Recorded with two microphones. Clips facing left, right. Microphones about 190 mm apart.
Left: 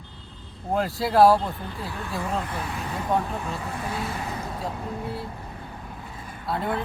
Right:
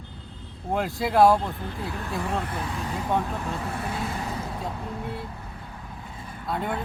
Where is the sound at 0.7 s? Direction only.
Centre (ahead or behind).